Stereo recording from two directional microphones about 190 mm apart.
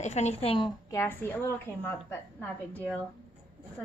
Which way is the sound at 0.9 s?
10° left (ahead or behind).